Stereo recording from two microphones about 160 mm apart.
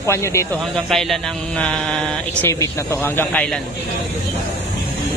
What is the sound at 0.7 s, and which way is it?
A man's voice, centre (ahead or behind).